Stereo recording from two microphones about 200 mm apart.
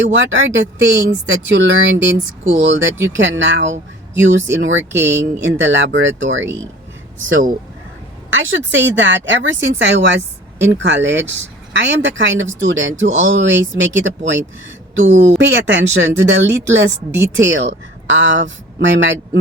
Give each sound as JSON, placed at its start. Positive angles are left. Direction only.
{"t": 0.1, "sound": "speech", "side_deg": -70}
{"t": 8.3, "sound": "speech", "side_deg": -75}